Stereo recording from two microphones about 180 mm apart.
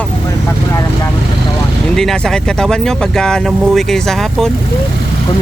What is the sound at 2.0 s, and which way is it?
Speech, 5° left (ahead or behind).